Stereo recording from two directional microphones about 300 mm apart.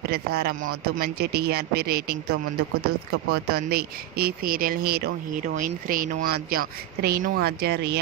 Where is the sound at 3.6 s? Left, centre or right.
Right.